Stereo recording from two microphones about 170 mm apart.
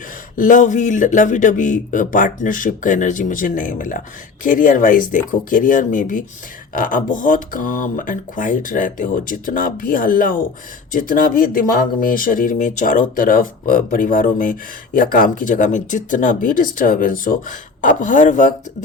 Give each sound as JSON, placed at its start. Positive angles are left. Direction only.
{"t": 0.3, "sound": "speech", "side_deg": 50}